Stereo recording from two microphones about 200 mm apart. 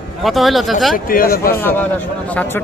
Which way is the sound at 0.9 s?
45° left (ahead or behind).